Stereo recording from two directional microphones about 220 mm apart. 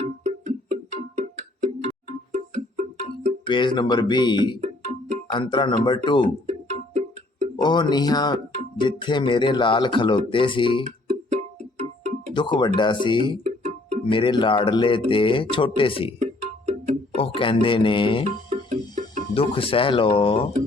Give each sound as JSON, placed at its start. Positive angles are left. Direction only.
{"t": 0.0, "sound": "music", "side_deg": -35}
{"t": 3.4, "sound": "speech", "side_deg": 20}
{"t": 4.6, "sound": "music", "side_deg": -30}
{"t": 5.3, "sound": "speech", "side_deg": 20}
{"t": 6.5, "sound": "music", "side_deg": -35}
{"t": 7.5, "sound": "speech", "side_deg": 20}
{"t": 11.3, "sound": "music", "side_deg": -35}
{"t": 12.3, "sound": "speech", "side_deg": 20}
{"t": 13.4, "sound": "music", "side_deg": -30}
{"t": 14.1, "sound": "speech", "side_deg": 20}
{"t": 16.1, "sound": "music", "side_deg": -30}
{"t": 17.2, "sound": "speech", "side_deg": 25}
{"t": 18.3, "sound": "music", "side_deg": -35}
{"t": 19.3, "sound": "speech", "side_deg": 25}